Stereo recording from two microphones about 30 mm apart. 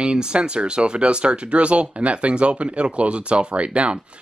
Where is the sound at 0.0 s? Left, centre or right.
Right.